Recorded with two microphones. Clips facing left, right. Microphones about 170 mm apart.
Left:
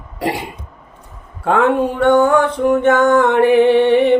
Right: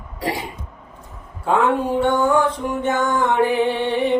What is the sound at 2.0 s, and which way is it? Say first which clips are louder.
Music: left 7 dB; 65° left (ahead or behind).